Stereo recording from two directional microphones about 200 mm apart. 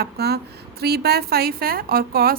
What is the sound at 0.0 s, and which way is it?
A woman's voice, 55° right (ahead or behind).